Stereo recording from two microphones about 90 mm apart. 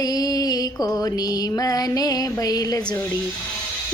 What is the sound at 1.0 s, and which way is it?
Mantra, 45° left (ahead or behind).